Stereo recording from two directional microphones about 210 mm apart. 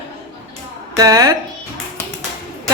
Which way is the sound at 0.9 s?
15° right (ahead or behind).